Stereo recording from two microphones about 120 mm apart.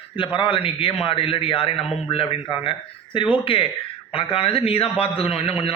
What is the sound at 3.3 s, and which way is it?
A man's voice, 50° left (ahead or behind).